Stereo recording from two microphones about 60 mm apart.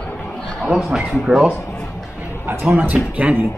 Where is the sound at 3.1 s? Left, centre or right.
Right.